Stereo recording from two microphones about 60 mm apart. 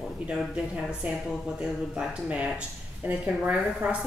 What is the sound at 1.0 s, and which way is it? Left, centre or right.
A woman's voice, centre.